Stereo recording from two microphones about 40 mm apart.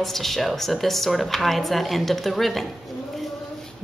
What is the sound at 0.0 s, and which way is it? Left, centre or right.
Speech, centre.